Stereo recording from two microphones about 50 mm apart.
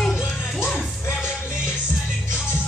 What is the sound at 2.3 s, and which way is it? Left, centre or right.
Music, left.